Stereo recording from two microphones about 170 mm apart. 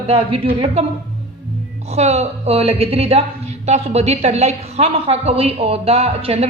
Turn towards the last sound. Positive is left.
turn(degrees=-35)  # may be behind; listen again after turning